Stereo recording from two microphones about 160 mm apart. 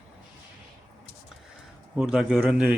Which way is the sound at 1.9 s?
5° right (ahead or behind).